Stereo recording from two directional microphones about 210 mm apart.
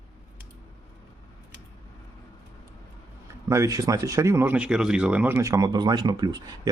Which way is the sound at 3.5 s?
15° right (ahead or behind).